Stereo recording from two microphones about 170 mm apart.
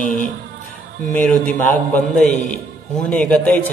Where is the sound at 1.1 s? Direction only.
10° left (ahead or behind).